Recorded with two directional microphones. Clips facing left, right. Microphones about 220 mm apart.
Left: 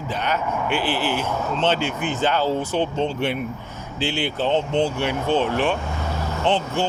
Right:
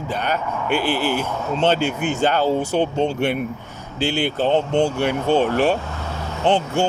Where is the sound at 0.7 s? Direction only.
45° right (ahead or behind).